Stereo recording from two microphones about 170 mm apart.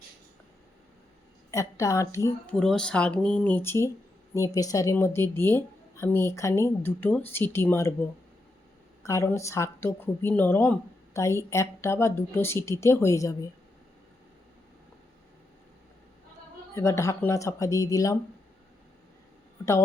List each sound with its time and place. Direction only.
1.5 s speech: 20° left (ahead or behind)
2.5 s a woman's voice: 5° left (ahead or behind)
9.0 s a woman's voice: 15° left (ahead or behind)
16.7 s speech: 15° left (ahead or behind)
19.6 s a woman's voice: 20° left (ahead or behind)